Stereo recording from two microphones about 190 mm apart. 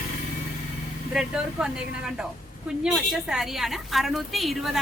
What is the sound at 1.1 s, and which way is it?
A woman's voice, 5° right (ahead or behind).